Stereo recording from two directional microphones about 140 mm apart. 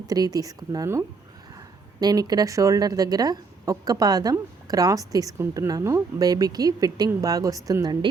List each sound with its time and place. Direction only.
0.1 s speech: 25° right (ahead or behind)